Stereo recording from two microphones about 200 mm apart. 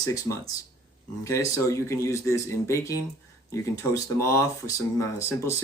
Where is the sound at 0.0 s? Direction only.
15° left (ahead or behind).